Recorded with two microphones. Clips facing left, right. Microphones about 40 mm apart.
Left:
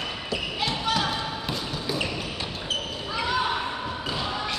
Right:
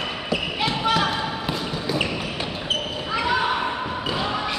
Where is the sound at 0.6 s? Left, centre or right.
Right.